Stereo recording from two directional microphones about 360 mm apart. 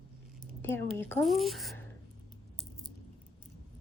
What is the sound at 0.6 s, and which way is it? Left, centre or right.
A woman's voice, centre.